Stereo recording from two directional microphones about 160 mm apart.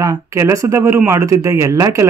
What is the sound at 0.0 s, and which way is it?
A man's voice, 20° right (ahead or behind).